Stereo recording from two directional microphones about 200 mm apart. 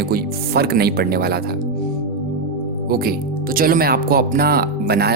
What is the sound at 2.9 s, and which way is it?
Speech, 50° right (ahead or behind).